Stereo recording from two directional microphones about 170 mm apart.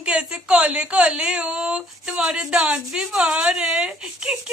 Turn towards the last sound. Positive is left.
turn(degrees=-5)  # may be behind; listen again after turning